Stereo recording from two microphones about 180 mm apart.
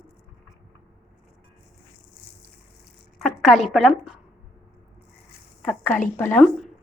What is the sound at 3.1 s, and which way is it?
Speech, centre (ahead or behind).